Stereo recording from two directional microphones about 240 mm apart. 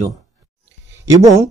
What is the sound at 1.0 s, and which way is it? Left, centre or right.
Speech, centre.